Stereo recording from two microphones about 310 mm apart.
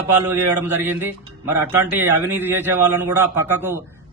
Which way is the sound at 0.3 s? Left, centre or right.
Centre.